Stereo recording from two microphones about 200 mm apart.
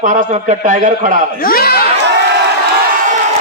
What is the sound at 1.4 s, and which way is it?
Speech, 50° left (ahead or behind).